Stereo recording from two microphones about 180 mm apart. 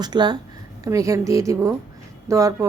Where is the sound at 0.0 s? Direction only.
25° right (ahead or behind).